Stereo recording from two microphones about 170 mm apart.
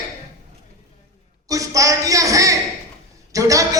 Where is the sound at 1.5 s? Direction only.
20° right (ahead or behind).